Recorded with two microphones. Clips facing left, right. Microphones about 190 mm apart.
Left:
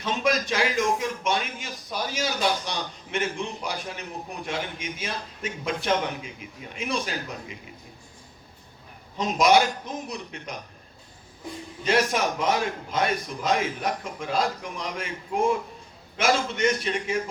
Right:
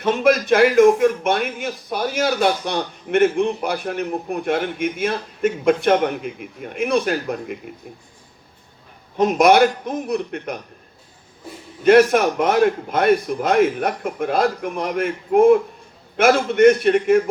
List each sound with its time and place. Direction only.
0.0 s speech: 55° right (ahead or behind)
9.1 s speech: 55° right (ahead or behind)
11.8 s speech: 55° right (ahead or behind)